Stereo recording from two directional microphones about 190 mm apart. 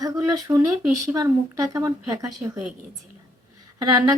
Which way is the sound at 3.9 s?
20° right (ahead or behind).